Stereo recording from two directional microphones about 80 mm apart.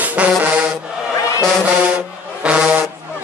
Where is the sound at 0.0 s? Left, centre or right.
Centre.